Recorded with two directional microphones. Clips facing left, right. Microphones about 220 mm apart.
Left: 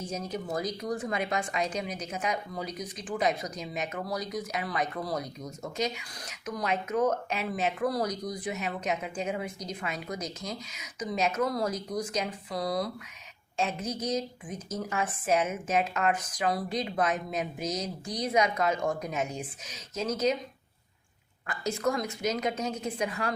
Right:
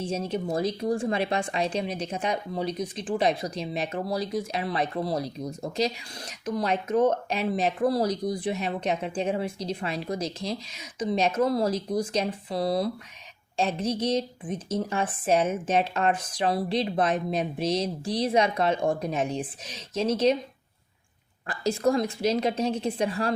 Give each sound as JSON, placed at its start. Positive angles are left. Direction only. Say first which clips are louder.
{"t": 0.0, "sound": "speech", "louder": "right 6 dB", "side_deg": -30}
{"t": 21.4, "sound": "speech", "louder": "right 5 dB", "side_deg": -30}